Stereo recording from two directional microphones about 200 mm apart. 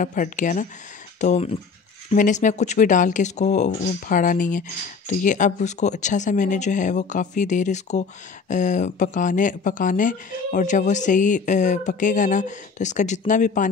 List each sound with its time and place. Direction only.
0.0 s speech: 40° left (ahead or behind)